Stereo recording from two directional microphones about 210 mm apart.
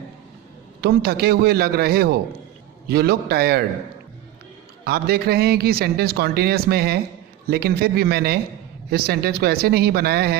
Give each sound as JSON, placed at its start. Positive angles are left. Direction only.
{"t": 0.8, "sound": "a man's voice", "side_deg": -50}
{"t": 4.9, "sound": "a man's voice", "side_deg": -50}